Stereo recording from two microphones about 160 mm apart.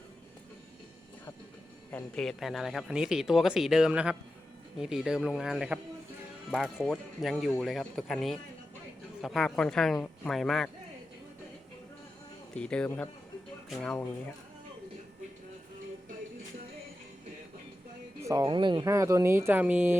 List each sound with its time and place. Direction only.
1.9 s speech: 10° left (ahead or behind)
12.5 s speech: 5° left (ahead or behind)
18.4 s speech: 30° right (ahead or behind); by 20.0 s 10° right (ahead or behind)